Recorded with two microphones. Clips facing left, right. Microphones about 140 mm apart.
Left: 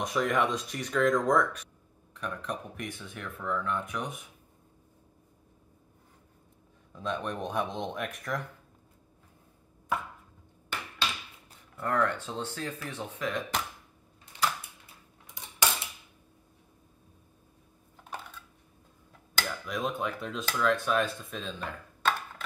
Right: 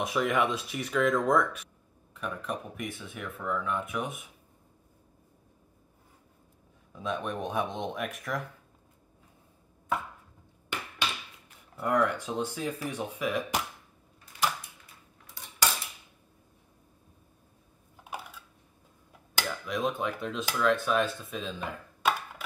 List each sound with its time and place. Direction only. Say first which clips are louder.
0.0 s speech: even; 5° right (ahead or behind)
6.9 s speech: right 1 dB; 5° right (ahead or behind)
11.8 s speech: right 2 dB; 10° right (ahead or behind)
15.4 s cutlery: left 1 dB; 20° left (ahead or behind)
18.0 s a sound: right 1 dB; 10° right (ahead or behind)
19.3 s speech: right 1 dB; centre (ahead or behind)